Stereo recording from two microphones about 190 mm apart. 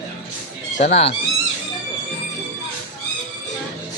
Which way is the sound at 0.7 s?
40° left (ahead or behind).